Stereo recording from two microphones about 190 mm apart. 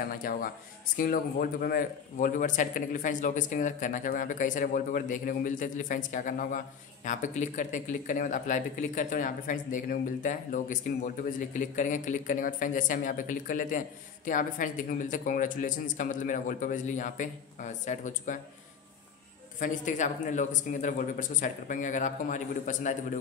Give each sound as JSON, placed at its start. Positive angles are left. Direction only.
{"t": 0.0, "sound": "speech", "side_deg": 50}
{"t": 19.6, "sound": "speech", "side_deg": 40}